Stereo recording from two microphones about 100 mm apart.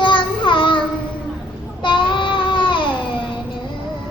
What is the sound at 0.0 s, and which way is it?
Child singing, 55° left (ahead or behind).